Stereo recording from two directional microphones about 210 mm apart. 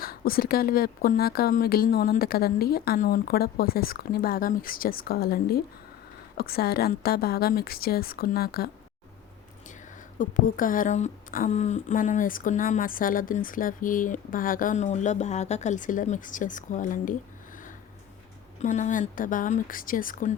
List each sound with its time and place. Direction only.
0.0 s speech: 45° left (ahead or behind)
10.2 s speech: 40° left (ahead or behind)
18.6 s speech: 35° left (ahead or behind)